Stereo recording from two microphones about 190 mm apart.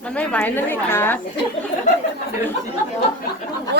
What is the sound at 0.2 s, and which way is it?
A woman's voice, 10° left (ahead or behind).